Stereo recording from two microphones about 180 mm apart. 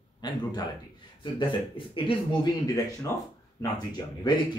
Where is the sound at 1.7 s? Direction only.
30° left (ahead or behind).